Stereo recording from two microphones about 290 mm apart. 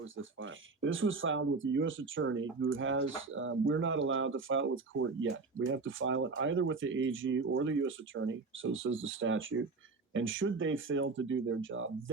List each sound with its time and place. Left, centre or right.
0.0 s speech: right